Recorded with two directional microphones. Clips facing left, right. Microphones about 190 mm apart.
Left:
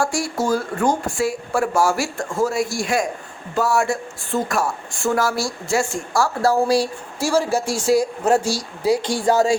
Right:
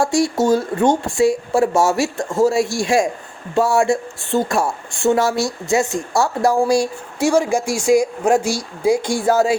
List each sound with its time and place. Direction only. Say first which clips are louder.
0.0 s speech: right 5 dB; 20° right (ahead or behind)